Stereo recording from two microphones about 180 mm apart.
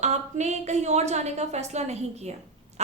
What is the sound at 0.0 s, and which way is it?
A woman's voice, 40° right (ahead or behind).